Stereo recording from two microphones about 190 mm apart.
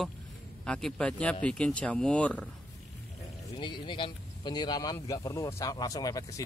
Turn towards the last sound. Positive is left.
turn(degrees=20)  # may be behind; listen again after turning